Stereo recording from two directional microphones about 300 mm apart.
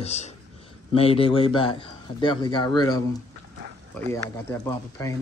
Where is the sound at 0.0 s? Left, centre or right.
Left.